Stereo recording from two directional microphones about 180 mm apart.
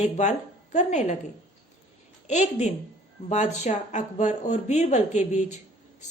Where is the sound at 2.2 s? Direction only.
40° left (ahead or behind).